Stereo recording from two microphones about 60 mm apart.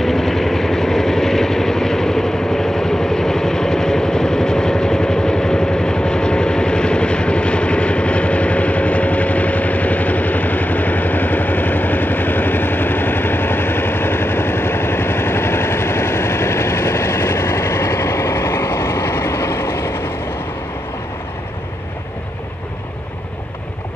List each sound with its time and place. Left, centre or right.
0.0 s vehicle: centre; by 20.0 s left